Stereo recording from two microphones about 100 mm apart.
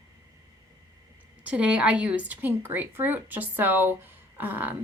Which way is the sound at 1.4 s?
10° right (ahead or behind).